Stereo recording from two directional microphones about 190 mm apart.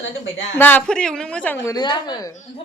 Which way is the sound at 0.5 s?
10° left (ahead or behind).